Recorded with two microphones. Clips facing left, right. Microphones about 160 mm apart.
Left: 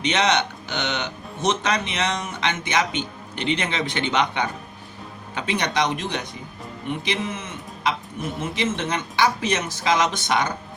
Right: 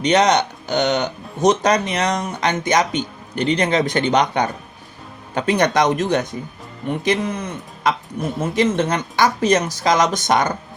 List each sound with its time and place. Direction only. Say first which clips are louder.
0.0 s speech: right 6 dB; 40° right (ahead or behind)